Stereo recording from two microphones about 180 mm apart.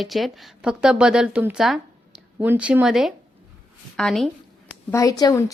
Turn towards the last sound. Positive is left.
turn(degrees=20)  # may be behind; listen again after turning